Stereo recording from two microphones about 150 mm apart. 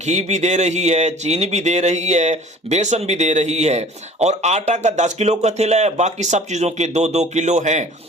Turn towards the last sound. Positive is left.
turn(degrees=-50)  # may be behind; listen again after turning